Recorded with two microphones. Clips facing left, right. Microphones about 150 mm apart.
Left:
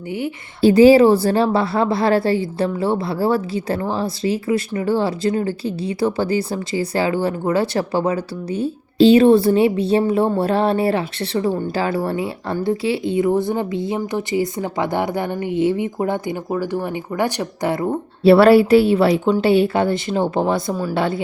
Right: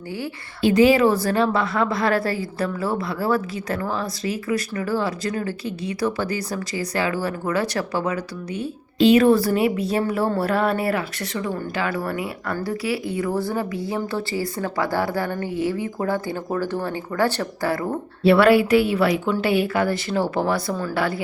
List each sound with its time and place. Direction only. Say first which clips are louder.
0.6 s a woman's voice: left 6 dB; 35° left (ahead or behind)
18.3 s a woman's voice: left 5 dB; 30° left (ahead or behind)